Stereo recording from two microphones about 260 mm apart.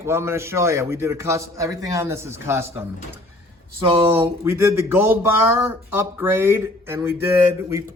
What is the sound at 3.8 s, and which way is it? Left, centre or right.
Speech, right.